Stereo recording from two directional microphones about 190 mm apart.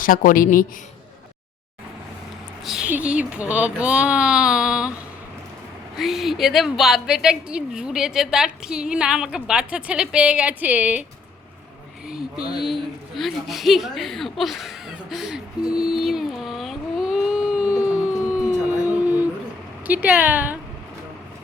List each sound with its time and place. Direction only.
0.0 s a woman's voice: 45° left (ahead or behind)
2.6 s a woman's voice: 5° right (ahead or behind)
6.0 s a woman's voice: centre (ahead or behind)
12.5 s a woman's voice: centre (ahead or behind)
18.9 s a sound: 10° right (ahead or behind)
19.9 s a woman's voice: 10° right (ahead or behind)